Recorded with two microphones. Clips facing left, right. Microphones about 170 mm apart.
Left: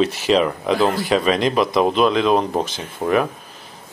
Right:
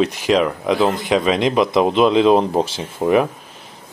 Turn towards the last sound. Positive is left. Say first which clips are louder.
# right 3 dB
turn(degrees=-15)  # may be behind; listen again after turning